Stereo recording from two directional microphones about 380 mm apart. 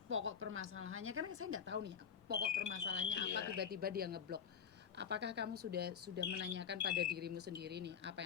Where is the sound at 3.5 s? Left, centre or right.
Right.